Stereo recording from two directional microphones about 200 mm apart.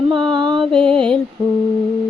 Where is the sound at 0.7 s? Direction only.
5° left (ahead or behind).